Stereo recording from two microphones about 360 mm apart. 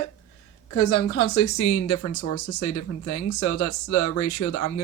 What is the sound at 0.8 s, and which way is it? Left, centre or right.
Speech, left.